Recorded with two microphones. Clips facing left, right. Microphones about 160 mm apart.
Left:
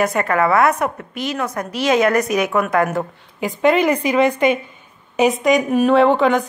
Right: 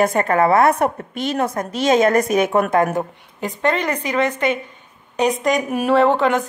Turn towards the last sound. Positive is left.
turn(degrees=0)  # may be behind; listen again after turning